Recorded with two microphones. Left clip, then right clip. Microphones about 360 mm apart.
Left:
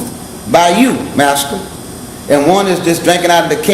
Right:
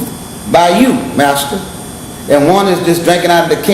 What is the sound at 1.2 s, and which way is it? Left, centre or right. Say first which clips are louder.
A man's voice: left 1 dB; left.